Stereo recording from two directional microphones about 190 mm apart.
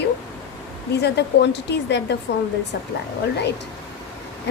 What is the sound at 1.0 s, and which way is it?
Speech, 65° left (ahead or behind).